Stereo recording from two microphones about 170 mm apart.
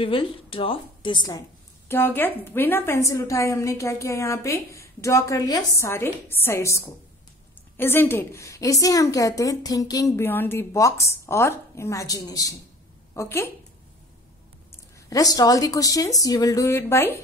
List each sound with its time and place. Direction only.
0.0 s a woman's voice: 30° left (ahead or behind)
1.9 s a woman's voice: 15° left (ahead or behind)
15.0 s speech: 20° left (ahead or behind)